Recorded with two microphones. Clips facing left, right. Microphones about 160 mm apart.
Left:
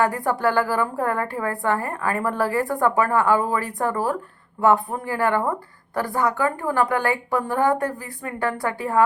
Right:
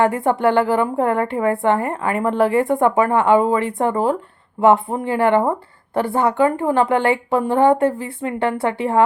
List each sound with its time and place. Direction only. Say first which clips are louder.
0.0 s a woman's voice: right 5 dB; 20° right (ahead or behind)